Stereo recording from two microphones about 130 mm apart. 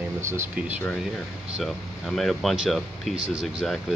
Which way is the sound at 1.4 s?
Centre (ahead or behind).